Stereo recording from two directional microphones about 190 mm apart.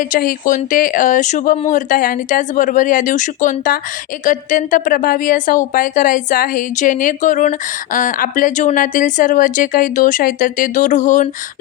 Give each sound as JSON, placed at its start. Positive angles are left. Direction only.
{"t": 0.0, "sound": "speech", "side_deg": 45}